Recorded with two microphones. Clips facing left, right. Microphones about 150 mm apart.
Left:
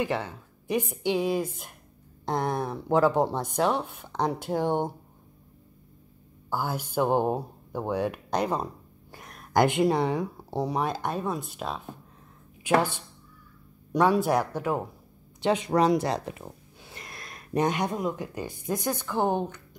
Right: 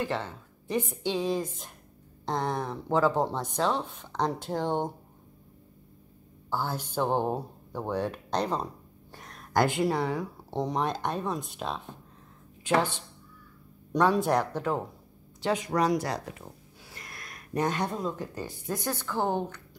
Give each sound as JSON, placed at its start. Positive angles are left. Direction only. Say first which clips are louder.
{"t": 0.0, "sound": "speech", "louder": "left 3 dB", "side_deg": 15}
{"t": 6.5, "sound": "speech", "louder": "left 2 dB", "side_deg": 10}
{"t": 9.1, "sound": "a sound", "louder": "left 3 dB", "side_deg": 10}
{"t": 10.6, "sound": "speech", "louder": "left 1 dB", "side_deg": 5}
{"t": 15.4, "sound": "speech", "louder": "left 4 dB", "side_deg": 25}